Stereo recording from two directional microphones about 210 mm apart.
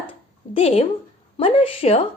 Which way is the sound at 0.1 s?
25° left (ahead or behind).